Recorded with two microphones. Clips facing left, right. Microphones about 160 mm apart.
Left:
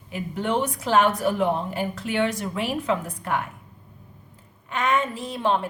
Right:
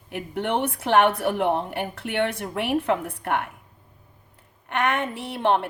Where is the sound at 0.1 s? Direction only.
60° right (ahead or behind).